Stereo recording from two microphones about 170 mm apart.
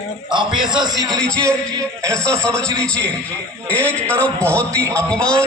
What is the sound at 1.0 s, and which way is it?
A man's voice, 5° left (ahead or behind).